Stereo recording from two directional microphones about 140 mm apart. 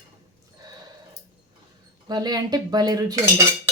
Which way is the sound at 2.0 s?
30° right (ahead or behind).